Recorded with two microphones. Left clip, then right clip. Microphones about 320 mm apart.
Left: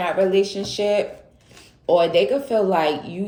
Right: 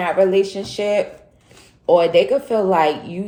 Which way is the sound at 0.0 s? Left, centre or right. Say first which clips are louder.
Right 3 dB; centre.